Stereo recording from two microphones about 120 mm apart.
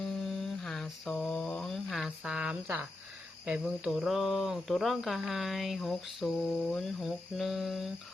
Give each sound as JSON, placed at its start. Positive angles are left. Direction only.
{"t": 0.3, "sound": "mantra", "side_deg": 5}
{"t": 3.4, "sound": "speech", "side_deg": -10}